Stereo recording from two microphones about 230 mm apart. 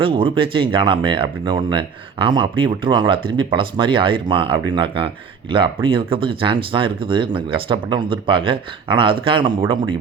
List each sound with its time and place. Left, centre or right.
0.0 s speech: right